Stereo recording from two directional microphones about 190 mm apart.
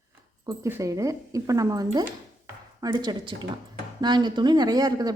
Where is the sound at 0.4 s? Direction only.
15° right (ahead or behind).